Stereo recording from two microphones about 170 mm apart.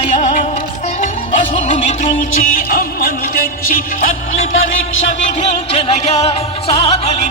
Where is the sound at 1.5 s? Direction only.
45° left (ahead or behind).